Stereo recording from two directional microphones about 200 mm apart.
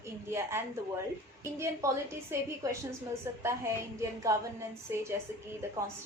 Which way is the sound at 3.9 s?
15° right (ahead or behind).